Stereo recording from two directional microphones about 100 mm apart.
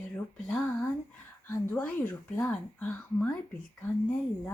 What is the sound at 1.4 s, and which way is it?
A woman's voice, 25° left (ahead or behind).